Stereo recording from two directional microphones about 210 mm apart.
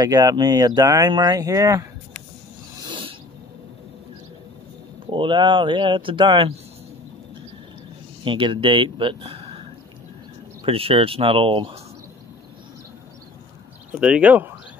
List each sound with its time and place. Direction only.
0.0 s speech: 15° right (ahead or behind)
2.8 s a sound: 25° right (ahead or behind)
5.0 s speech: 25° right (ahead or behind)
8.2 s speech: 25° right (ahead or behind)
10.6 s speech: 25° right (ahead or behind)
13.9 s speech: 5° right (ahead or behind)